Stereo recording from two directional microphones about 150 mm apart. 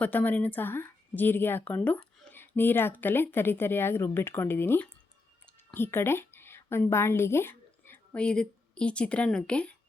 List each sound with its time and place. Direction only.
0.0 s a woman's voice: 10° left (ahead or behind)